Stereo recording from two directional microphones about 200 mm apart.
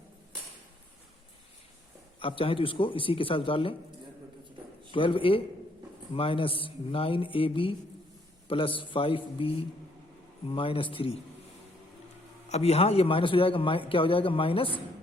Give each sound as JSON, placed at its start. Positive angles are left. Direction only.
{"t": 2.1, "sound": "a man's voice", "side_deg": 25}
{"t": 4.9, "sound": "a man's voice", "side_deg": 25}
{"t": 12.5, "sound": "a man's voice", "side_deg": 30}